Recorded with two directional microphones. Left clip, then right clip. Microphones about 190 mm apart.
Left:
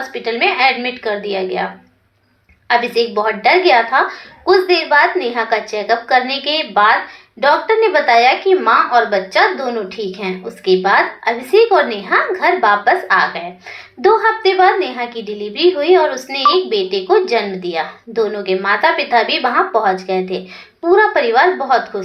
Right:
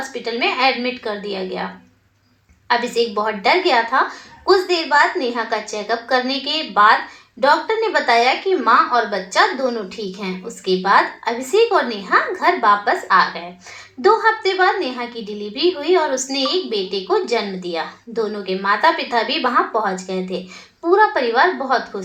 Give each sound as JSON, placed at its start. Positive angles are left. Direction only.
{"t": 0.1, "sound": "a woman's voice", "side_deg": 20}
{"t": 2.6, "sound": "a woman's voice", "side_deg": 25}